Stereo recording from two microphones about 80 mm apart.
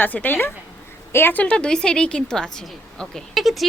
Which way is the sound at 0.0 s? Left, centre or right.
Left.